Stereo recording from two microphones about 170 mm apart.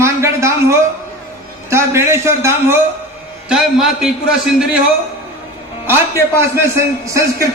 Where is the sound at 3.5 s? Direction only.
5° right (ahead or behind).